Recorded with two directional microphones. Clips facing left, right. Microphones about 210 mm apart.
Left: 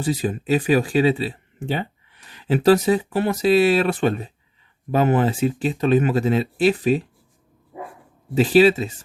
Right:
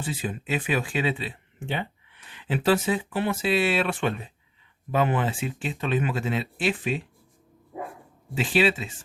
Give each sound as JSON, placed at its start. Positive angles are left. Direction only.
{"t": 0.0, "sound": "speech", "side_deg": 40}
{"t": 8.4, "sound": "speech", "side_deg": 40}